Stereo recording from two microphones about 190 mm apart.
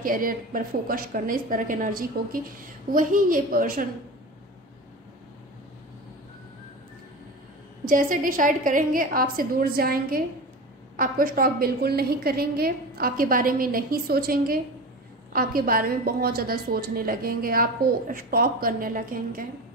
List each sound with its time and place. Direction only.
0.0 s a woman's voice: 45° right (ahead or behind)
7.8 s a woman's voice: 45° right (ahead or behind)